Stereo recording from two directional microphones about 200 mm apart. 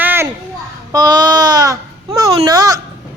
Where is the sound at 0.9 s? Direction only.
20° right (ahead or behind).